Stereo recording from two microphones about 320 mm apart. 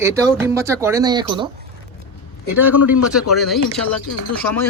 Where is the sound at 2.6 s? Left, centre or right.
Centre.